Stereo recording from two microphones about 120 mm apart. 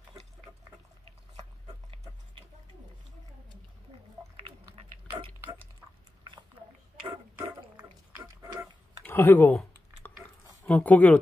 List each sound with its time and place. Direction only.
9.0 s speech: 15° left (ahead or behind)
10.7 s speech: 15° left (ahead or behind)